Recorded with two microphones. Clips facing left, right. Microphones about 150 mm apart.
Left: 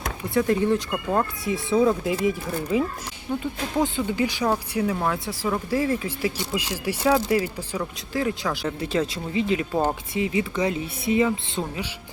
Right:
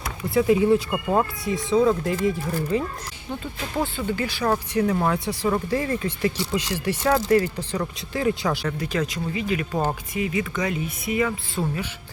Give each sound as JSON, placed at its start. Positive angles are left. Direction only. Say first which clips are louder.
{"t": 0.3, "sound": "speech", "louder": "right 3 dB", "side_deg": -5}
{"t": 3.4, "sound": "speech", "louder": "left 2 dB", "side_deg": 15}
{"t": 8.6, "sound": "speech", "louder": "left 1 dB", "side_deg": 25}
{"t": 11.3, "sound": "speech", "louder": "even", "side_deg": 15}